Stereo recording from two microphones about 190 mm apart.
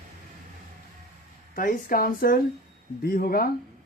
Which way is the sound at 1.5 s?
45° left (ahead or behind).